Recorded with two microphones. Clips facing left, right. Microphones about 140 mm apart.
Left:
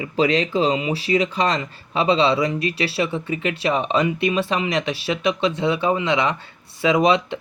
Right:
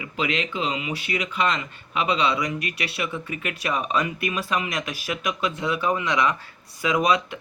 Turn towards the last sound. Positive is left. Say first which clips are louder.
# left 5 dB
turn(degrees=25)  # may be behind; listen again after turning